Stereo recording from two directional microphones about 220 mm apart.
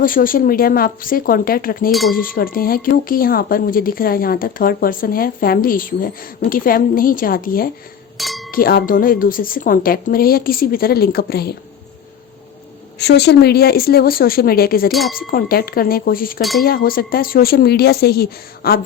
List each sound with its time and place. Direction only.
0.0 s speech: 40° left (ahead or behind)
1.9 s speech: centre (ahead or behind)
2.1 s speech: 40° left (ahead or behind)
8.2 s speech: centre (ahead or behind)
8.4 s speech: 40° left (ahead or behind)
13.0 s speech: 50° left (ahead or behind)
14.9 s speech: centre (ahead or behind)
15.3 s speech: 45° left (ahead or behind)
16.4 s speech: centre (ahead or behind)
16.6 s speech: 40° left (ahead or behind)